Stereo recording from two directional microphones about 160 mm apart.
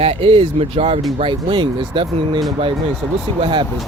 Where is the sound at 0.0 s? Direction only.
35° right (ahead or behind).